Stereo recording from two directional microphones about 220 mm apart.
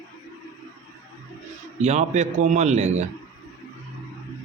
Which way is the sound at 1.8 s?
30° right (ahead or behind).